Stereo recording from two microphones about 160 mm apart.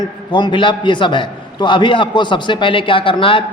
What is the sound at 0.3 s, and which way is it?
A man's voice, 30° left (ahead or behind).